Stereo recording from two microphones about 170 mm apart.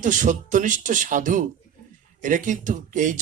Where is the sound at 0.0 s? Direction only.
50° right (ahead or behind).